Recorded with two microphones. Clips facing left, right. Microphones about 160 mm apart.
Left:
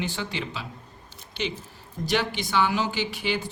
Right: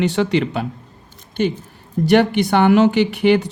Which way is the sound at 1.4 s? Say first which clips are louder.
Right 11 dB; 50° right (ahead or behind).